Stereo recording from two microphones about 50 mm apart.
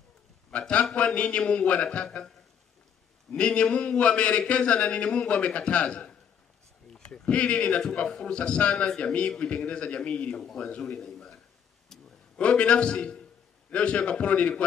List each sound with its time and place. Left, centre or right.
0.5 s a man's voice: left
10.8 s a sound: centre
12.4 s a man's voice: left